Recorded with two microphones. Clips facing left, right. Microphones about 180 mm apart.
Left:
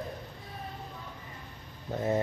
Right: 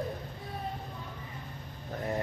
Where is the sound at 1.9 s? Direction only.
25° left (ahead or behind).